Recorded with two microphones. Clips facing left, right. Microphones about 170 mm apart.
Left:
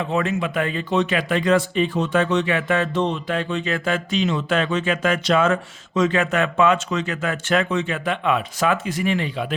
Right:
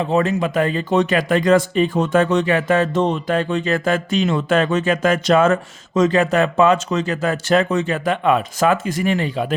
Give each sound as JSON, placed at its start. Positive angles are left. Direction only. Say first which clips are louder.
{"t": 0.0, "sound": "speech", "louder": "right 4 dB", "side_deg": -35}